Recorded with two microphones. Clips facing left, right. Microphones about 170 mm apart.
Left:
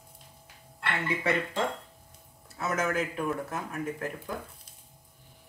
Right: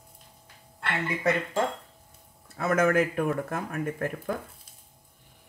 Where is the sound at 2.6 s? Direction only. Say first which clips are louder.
Right 6 dB; 55° right (ahead or behind).